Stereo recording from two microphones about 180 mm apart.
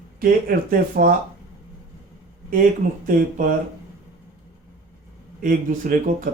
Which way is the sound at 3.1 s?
50° right (ahead or behind).